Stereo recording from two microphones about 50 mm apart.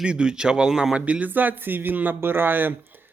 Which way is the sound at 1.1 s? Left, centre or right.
Right.